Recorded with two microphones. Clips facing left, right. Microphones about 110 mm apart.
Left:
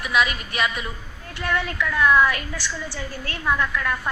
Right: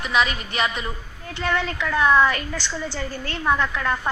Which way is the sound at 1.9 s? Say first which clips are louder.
Right 1 dB; 25° right (ahead or behind).